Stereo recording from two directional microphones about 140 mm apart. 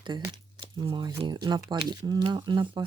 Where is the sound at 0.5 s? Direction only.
35° right (ahead or behind).